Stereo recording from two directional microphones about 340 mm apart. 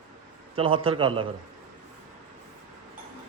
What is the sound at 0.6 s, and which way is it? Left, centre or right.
Speech, centre.